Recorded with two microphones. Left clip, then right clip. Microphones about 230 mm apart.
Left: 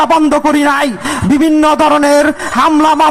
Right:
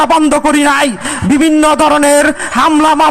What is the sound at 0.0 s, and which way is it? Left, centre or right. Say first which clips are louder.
A man's voice: even; right.